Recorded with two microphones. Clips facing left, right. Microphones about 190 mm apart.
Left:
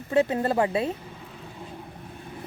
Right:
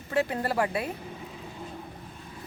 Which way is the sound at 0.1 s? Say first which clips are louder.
Left 5 dB; 20° left (ahead or behind).